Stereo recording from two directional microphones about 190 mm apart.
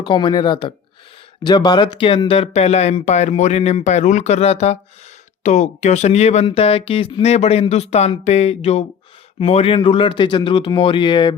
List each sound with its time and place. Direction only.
0.0 s speech: 25° left (ahead or behind)